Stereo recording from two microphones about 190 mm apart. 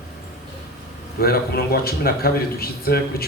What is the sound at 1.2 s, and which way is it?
Speech, 55° left (ahead or behind).